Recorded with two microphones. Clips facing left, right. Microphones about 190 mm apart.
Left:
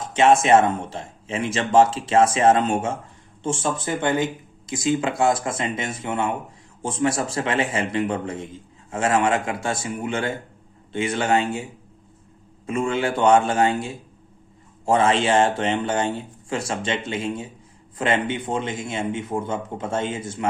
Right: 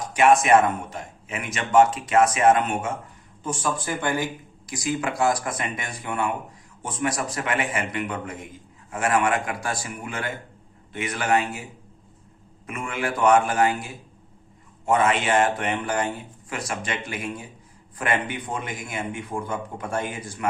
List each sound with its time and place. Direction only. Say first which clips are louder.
0.0 s a man's voice: left 1 dB; 25° left (ahead or behind)